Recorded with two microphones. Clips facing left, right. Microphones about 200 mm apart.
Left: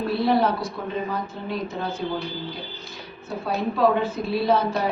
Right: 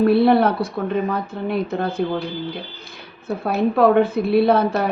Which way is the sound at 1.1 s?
60° right (ahead or behind).